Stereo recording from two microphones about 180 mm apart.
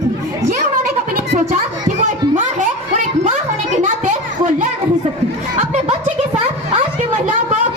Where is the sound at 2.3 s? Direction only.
45° right (ahead or behind).